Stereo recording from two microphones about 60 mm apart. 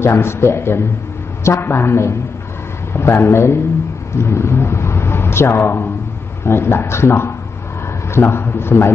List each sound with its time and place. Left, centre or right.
0.0 s a man's voice: left